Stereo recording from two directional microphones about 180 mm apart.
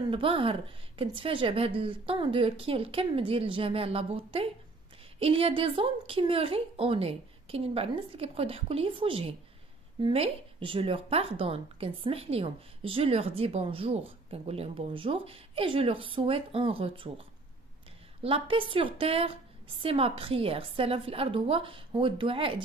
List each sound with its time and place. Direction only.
0.1 s a woman's voice: 30° right (ahead or behind)